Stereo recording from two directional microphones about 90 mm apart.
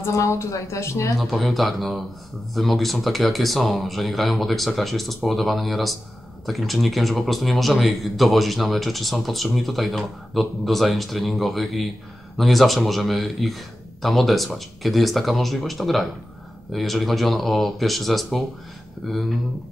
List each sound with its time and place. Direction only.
0.0 s speech: 35° left (ahead or behind)
1.1 s a man's voice: centre (ahead or behind)